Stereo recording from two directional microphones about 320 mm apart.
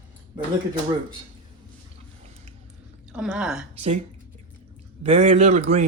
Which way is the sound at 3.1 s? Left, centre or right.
Centre.